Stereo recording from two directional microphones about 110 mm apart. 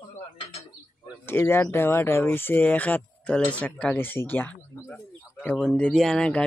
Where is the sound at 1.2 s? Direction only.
20° left (ahead or behind).